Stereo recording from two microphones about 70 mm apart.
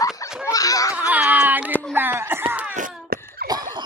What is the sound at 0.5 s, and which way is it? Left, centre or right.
Laughter, left.